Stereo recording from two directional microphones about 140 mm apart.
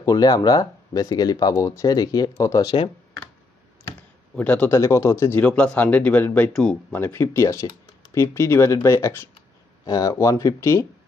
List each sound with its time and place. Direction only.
0.0 s speech: 25° left (ahead or behind)
4.4 s speech: 10° left (ahead or behind)